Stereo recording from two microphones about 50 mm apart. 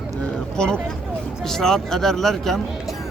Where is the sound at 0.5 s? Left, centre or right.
Centre.